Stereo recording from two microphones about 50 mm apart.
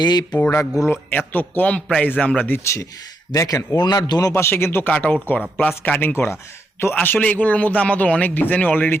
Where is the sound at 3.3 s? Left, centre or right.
Left.